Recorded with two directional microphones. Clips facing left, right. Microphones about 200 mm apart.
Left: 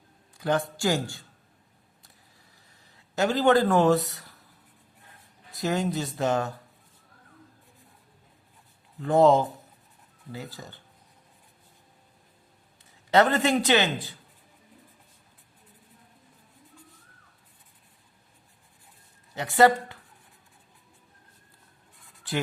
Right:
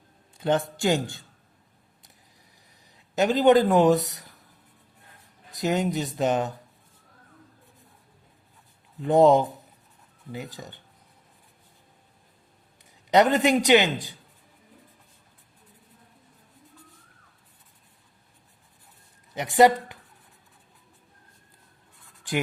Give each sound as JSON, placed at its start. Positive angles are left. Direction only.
{"t": 0.3, "sound": "speech", "side_deg": -25}
{"t": 2.9, "sound": "speech", "side_deg": -15}
{"t": 5.5, "sound": "speech", "side_deg": -20}
{"t": 9.0, "sound": "speech", "side_deg": -15}
{"t": 12.8, "sound": "a man's voice", "side_deg": -15}
{"t": 19.3, "sound": "speech", "side_deg": -20}